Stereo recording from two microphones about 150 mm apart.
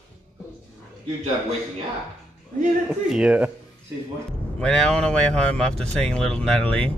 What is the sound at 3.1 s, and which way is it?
Speech, 5° right (ahead or behind).